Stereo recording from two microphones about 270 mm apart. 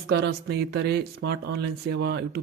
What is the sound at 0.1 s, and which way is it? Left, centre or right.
Speech, right.